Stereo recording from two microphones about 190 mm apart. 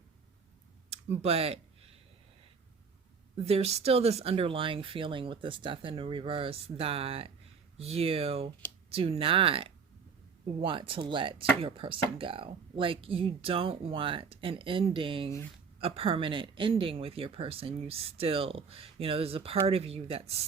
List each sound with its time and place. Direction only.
0.9 s speech: 35° right (ahead or behind)
3.3 s speech: 35° right (ahead or behind)